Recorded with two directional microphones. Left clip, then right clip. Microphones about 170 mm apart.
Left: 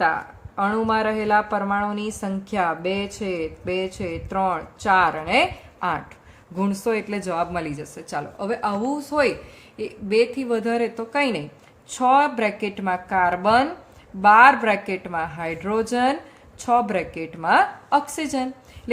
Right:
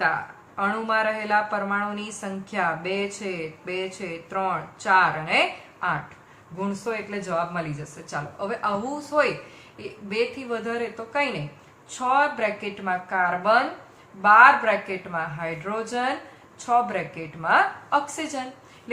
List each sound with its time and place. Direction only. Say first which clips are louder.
0.5 s a woman's voice: left 2 dB; 30° left (ahead or behind)